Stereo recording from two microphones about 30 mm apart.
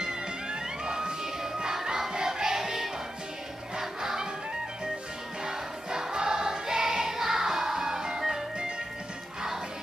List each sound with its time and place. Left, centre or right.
0.0 s music: right
4.0 s music: centre
5.4 s choir: right